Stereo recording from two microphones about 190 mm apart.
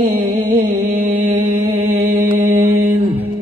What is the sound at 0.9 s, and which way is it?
Mantra, 45° right (ahead or behind).